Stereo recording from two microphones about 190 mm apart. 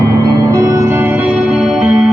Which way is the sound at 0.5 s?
15° right (ahead or behind).